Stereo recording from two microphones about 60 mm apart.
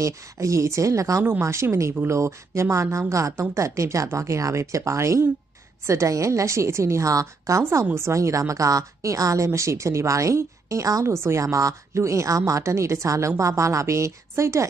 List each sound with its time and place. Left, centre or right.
0.0 s a woman's voice: right
1.4 s a woman's voice: right
11.1 s speech: right
11.4 s a woman's voice: right